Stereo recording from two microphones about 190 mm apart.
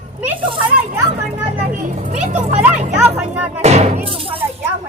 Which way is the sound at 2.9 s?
10° right (ahead or behind).